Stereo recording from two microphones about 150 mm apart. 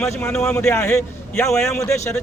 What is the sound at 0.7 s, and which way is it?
Speech, 20° left (ahead or behind).